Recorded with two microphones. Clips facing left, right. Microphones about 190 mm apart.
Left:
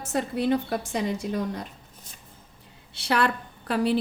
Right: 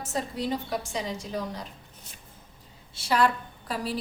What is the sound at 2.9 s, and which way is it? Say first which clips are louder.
A woman's voice: even; 65° left (ahead or behind).